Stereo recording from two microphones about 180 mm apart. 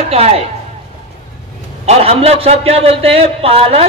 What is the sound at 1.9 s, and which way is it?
A man's voice, 35° right (ahead or behind).